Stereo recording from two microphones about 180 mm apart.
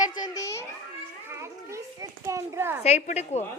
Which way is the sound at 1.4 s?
15° right (ahead or behind).